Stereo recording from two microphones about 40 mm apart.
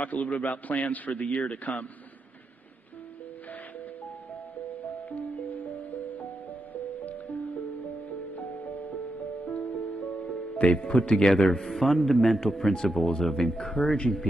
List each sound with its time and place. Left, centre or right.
0.0 s a man's voice: left
5.1 s music: left
9.5 s music: left
11.2 s a man's voice: centre